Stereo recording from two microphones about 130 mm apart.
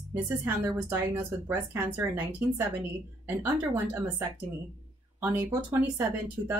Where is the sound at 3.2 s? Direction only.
20° right (ahead or behind).